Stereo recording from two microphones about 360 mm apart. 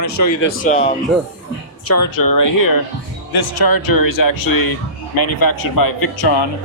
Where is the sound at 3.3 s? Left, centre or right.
Left.